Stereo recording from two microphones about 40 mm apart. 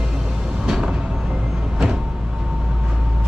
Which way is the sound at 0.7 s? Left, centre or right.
Centre.